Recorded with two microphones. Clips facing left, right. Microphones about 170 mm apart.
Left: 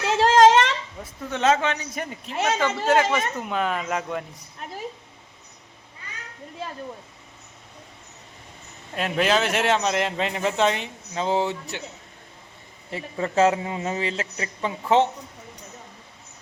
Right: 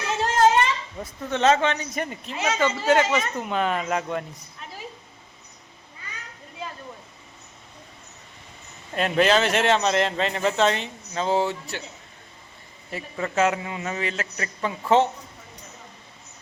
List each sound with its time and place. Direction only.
0.1 s a sound: 90° left
1.3 s speech: 5° left (ahead or behind)
9.0 s speech: 5° left (ahead or behind)
12.9 s a man's voice: 30° left (ahead or behind)